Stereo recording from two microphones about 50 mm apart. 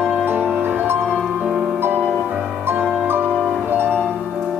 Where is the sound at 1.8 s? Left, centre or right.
Right.